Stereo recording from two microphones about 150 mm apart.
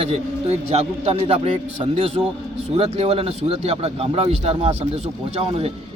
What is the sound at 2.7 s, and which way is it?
Speech, 45° right (ahead or behind).